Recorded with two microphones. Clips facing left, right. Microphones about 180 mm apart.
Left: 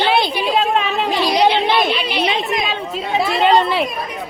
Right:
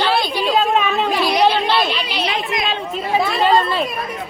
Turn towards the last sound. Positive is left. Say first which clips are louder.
# left 2 dB
turn(degrees=20)  # may be behind; listen again after turning